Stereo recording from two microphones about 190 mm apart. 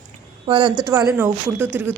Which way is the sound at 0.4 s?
25° right (ahead or behind).